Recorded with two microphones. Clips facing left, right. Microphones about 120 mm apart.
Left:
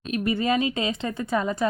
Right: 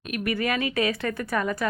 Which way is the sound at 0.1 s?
25° left (ahead or behind).